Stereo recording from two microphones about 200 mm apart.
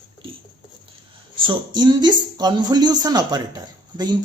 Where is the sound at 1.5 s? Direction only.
20° right (ahead or behind).